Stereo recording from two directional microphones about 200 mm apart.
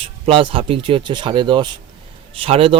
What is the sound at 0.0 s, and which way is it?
Speech, 25° right (ahead or behind).